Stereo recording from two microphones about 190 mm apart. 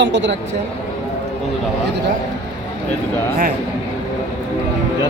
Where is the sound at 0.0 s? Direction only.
70° right (ahead or behind).